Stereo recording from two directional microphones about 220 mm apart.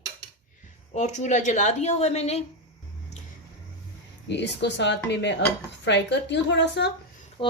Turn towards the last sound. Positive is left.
turn(degrees=25)  # may be behind; listen again after turning